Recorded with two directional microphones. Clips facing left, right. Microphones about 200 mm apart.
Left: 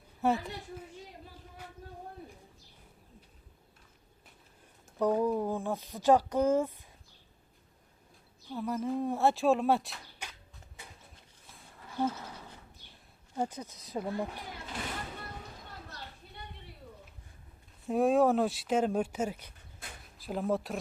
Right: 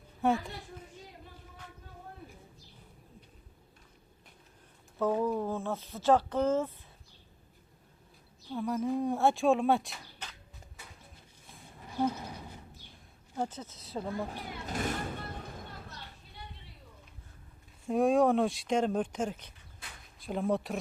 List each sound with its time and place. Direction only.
0.2 s speech: centre (ahead or behind)
4.9 s a sound: 15° left (ahead or behind)
5.4 s speech: 15° left (ahead or behind)
8.4 s speech: centre (ahead or behind)
10.2 s a sound: 10° left (ahead or behind)
11.8 s a sound: 15° right (ahead or behind)
12.9 s a woman's voice: 10° left (ahead or behind)
14.7 s vehicle: 45° right (ahead or behind)
17.8 s speech: centre (ahead or behind)